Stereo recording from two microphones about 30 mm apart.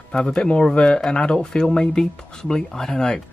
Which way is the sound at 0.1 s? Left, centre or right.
Left.